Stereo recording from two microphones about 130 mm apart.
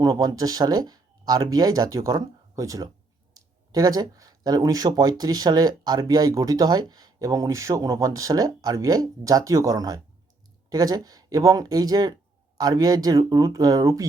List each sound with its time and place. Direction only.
0.0 s speech: 30° right (ahead or behind)